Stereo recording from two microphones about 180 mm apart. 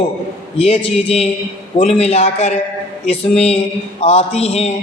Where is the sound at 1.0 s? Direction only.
35° left (ahead or behind).